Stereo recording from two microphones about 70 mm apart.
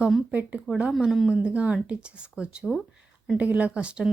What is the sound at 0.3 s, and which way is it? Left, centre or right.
Speech, centre.